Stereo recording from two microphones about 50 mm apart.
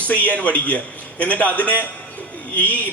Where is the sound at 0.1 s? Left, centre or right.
Left.